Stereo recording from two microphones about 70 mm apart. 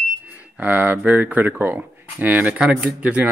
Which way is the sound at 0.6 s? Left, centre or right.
Right.